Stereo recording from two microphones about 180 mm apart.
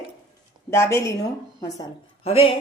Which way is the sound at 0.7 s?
15° left (ahead or behind).